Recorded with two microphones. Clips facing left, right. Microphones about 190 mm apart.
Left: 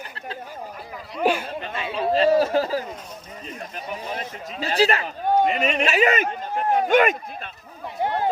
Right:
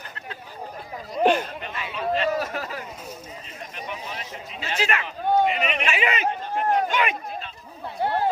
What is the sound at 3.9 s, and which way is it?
Speech, 45° left (ahead or behind).